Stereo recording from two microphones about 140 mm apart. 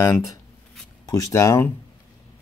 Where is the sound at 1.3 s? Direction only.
20° left (ahead or behind).